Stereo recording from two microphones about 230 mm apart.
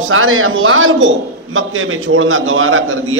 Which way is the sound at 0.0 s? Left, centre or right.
Right.